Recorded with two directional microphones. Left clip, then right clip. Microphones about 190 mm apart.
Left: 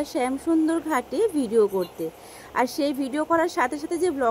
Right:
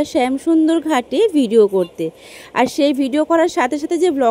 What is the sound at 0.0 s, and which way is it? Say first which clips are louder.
Speech: right 9 dB; 70° right (ahead or behind).